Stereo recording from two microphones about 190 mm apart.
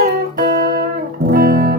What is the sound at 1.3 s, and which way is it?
Guitar, 55° right (ahead or behind).